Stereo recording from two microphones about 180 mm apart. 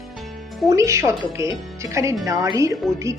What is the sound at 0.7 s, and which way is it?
Speech, 15° right (ahead or behind).